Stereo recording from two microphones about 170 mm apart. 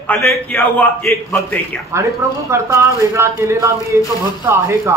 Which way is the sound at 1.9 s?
15° right (ahead or behind).